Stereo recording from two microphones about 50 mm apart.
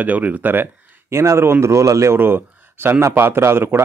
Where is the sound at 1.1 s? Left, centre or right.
Right.